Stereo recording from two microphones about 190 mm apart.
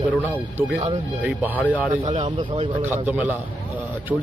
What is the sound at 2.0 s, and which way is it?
Speech, 25° right (ahead or behind).